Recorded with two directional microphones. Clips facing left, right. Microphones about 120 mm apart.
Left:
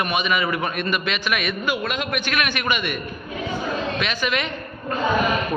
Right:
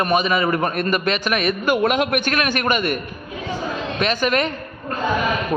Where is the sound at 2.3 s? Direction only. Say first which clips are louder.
Right 3 dB; 40° right (ahead or behind).